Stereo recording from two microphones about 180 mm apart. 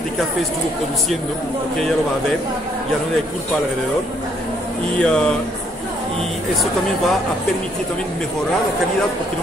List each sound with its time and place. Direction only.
4.9 s speech: 5° left (ahead or behind)